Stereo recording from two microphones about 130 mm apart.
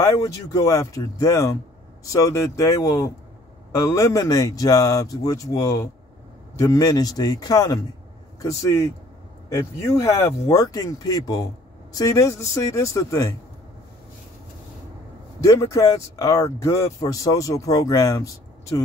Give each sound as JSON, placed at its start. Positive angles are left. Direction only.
{"t": 0.1, "sound": "speech", "side_deg": 30}
{"t": 15.4, "sound": "speech", "side_deg": 25}